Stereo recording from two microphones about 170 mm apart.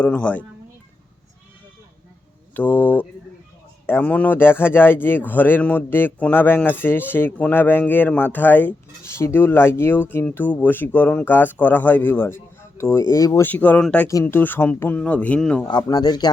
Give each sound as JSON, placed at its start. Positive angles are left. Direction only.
{"t": 0.0, "sound": "speech", "side_deg": 10}
{"t": 2.6, "sound": "speech", "side_deg": 10}
{"t": 15.6, "sound": "speech", "side_deg": 25}